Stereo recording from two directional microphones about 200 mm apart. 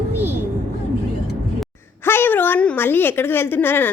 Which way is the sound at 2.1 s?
10° left (ahead or behind).